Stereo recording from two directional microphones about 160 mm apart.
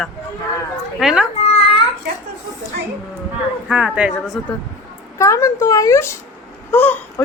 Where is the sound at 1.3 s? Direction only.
40° left (ahead or behind).